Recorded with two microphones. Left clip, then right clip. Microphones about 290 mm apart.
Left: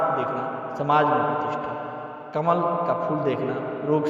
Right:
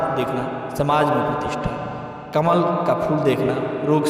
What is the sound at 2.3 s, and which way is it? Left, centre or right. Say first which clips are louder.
A man's voice: right 4 dB; right.